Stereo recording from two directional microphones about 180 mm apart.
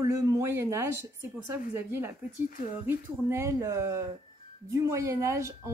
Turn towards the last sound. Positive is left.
turn(degrees=-15)  # may be behind; listen again after turning